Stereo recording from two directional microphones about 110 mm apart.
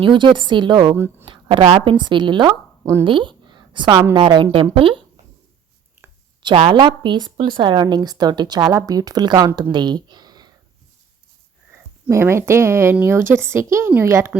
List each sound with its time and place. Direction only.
0.0 s a woman's voice: 50° right (ahead or behind)
6.4 s speech: 55° right (ahead or behind)
9.7 s a sound: 40° right (ahead or behind)
11.7 s speech: 25° right (ahead or behind)